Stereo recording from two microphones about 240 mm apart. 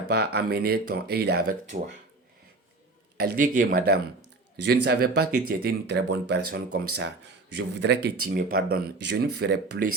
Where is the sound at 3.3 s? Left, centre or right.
Right.